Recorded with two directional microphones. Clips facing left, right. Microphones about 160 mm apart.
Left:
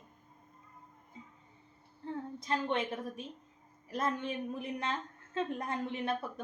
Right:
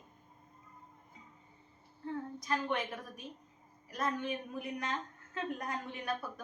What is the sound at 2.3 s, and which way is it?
A woman's voice, 25° left (ahead or behind).